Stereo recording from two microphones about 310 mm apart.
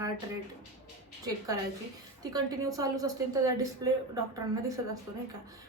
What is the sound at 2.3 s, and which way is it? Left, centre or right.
A woman's voice, centre.